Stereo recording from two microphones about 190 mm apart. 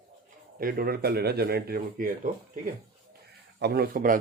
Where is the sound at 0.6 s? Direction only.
50° right (ahead or behind).